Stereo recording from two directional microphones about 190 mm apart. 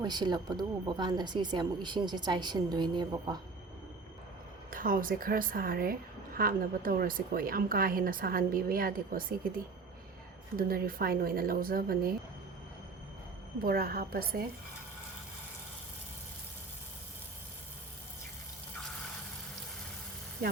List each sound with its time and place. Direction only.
0.0 s a woman's voice: 20° right (ahead or behind)
4.7 s a woman's voice: 45° right (ahead or behind)
10.6 s a woman's voice: 50° right (ahead or behind)
13.7 s a woman's voice: 50° right (ahead or behind)